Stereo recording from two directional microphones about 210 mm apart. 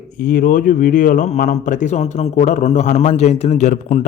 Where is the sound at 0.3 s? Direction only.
45° left (ahead or behind).